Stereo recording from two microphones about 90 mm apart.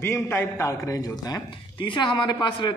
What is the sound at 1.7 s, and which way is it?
Speech, 65° left (ahead or behind).